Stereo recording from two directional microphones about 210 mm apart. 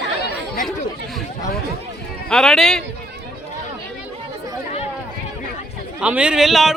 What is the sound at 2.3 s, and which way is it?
Speech, centre (ahead or behind).